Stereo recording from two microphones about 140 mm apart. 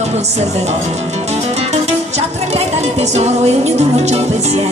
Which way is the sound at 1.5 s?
50° right (ahead or behind).